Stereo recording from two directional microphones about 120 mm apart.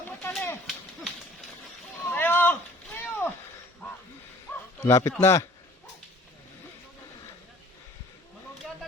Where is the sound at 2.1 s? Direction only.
15° left (ahead or behind).